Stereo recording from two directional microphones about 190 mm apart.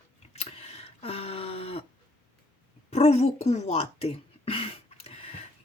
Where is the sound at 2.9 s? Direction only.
35° left (ahead or behind).